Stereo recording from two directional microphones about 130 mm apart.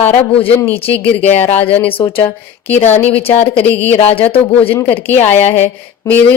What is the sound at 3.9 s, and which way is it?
Speech, 45° left (ahead or behind).